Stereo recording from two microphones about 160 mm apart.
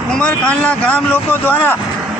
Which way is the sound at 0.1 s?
5° left (ahead or behind).